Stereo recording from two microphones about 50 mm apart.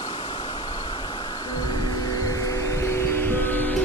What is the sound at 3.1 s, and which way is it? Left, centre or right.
Music, left.